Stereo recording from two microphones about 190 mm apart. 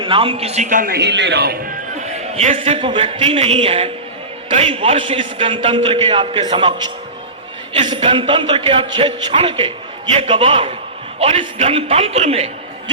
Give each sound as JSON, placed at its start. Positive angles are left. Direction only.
{"t": 0.0, "sound": "a man's voice", "side_deg": -25}
{"t": 2.0, "sound": "a man's voice", "side_deg": -35}